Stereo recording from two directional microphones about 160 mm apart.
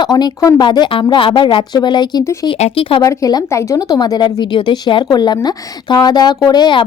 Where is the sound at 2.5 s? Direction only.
35° left (ahead or behind).